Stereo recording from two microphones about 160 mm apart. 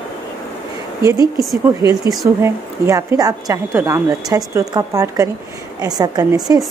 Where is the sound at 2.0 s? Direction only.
20° right (ahead or behind).